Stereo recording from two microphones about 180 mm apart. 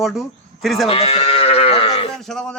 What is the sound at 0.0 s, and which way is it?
Speech, centre (ahead or behind).